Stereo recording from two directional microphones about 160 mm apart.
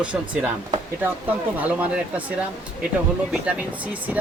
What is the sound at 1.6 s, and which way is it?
Speech, 10° right (ahead or behind).